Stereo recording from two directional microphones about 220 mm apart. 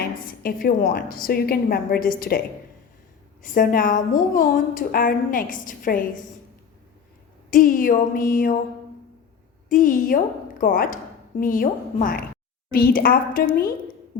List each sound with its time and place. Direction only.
0.0 s a woman's voice: 40° left (ahead or behind)
3.4 s a woman's voice: 40° left (ahead or behind)
7.5 s a woman's voice: 40° left (ahead or behind)
9.6 s a woman's voice: 40° left (ahead or behind)